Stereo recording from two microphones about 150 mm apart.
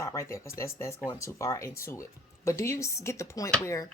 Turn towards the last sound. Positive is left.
turn(degrees=20)  # may be behind; listen again after turning